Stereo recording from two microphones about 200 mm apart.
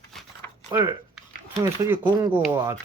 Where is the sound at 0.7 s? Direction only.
15° right (ahead or behind).